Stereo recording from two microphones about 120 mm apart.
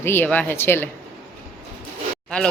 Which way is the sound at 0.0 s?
20° left (ahead or behind).